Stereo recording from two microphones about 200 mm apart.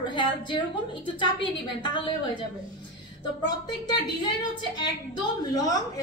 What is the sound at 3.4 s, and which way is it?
Speech, 20° left (ahead or behind).